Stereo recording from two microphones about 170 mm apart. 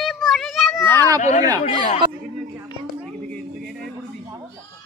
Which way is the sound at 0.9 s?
20° right (ahead or behind).